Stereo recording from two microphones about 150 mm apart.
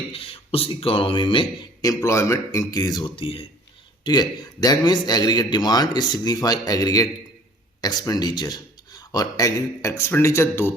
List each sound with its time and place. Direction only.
0.1 s speech: 40° left (ahead or behind)
1.8 s a man's voice: 20° left (ahead or behind)
3.2 s speech: 40° left (ahead or behind)
4.0 s a man's voice: 25° left (ahead or behind)